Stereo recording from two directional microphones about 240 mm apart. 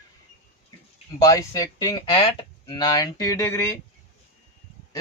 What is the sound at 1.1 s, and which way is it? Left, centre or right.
Speech, centre.